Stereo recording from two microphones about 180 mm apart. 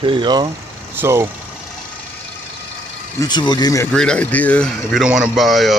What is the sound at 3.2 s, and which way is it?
Speech, 25° left (ahead or behind).